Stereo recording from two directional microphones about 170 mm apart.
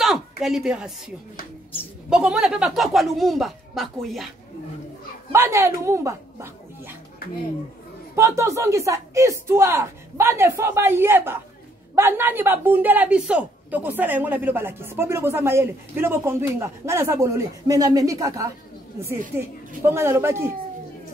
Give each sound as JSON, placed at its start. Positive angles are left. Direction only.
{"t": 0.0, "sound": "a woman's voice", "side_deg": 0}
{"t": 2.0, "sound": "speech", "side_deg": -5}
{"t": 5.3, "sound": "a woman's voice", "side_deg": -15}
{"t": 8.2, "sound": "a woman's voice", "side_deg": -20}